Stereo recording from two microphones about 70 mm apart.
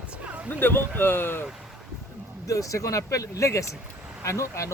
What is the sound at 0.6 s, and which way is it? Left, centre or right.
Speech, left.